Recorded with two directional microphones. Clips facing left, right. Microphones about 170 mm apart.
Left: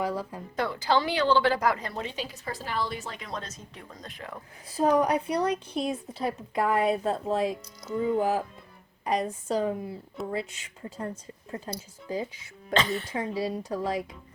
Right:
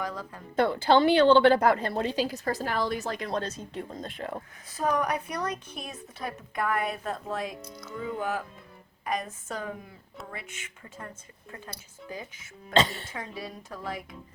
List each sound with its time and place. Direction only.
0.0 s speech: 30° left (ahead or behind)
0.7 s a woman's voice: 25° right (ahead or behind)
4.7 s a woman's voice: 30° left (ahead or behind)
12.7 s speech: 25° right (ahead or behind)
13.3 s a woman's voice: 30° left (ahead or behind)